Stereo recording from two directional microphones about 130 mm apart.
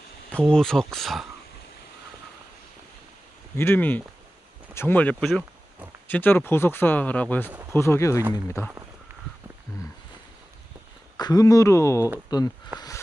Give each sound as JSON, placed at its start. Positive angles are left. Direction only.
{"t": 0.5, "sound": "speech", "side_deg": 5}
{"t": 3.5, "sound": "speech", "side_deg": 15}
{"t": 11.1, "sound": "speech", "side_deg": 30}